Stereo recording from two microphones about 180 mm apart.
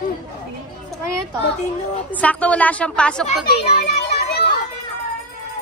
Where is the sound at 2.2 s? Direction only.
5° left (ahead or behind).